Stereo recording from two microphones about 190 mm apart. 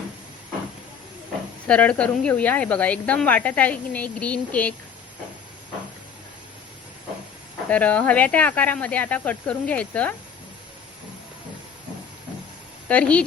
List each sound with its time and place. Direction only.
1.6 s speech: 5° left (ahead or behind)
7.7 s speech: 5° left (ahead or behind)
12.9 s speech: 5° left (ahead or behind)